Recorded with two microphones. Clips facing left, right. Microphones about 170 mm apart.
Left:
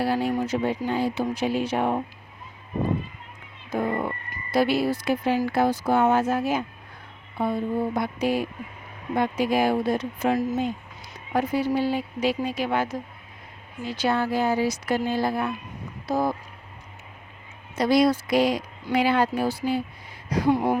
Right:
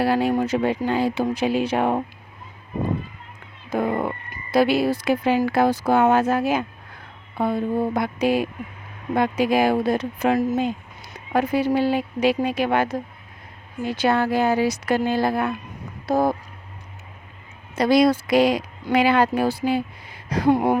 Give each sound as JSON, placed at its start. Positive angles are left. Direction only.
{"t": 0.0, "sound": "speech", "side_deg": -80}
{"t": 3.7, "sound": "speech", "side_deg": -75}
{"t": 4.5, "sound": "speech", "side_deg": -90}
{"t": 7.3, "sound": "speech", "side_deg": -75}
{"t": 16.0, "sound": "a sound", "side_deg": -55}
{"t": 17.7, "sound": "speech", "side_deg": -70}
{"t": 20.3, "sound": "speech", "side_deg": -60}